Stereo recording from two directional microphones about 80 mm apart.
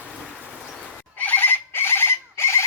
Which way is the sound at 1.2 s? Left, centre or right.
Left.